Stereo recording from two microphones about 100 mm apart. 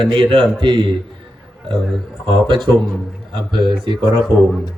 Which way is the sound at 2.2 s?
50° right (ahead or behind).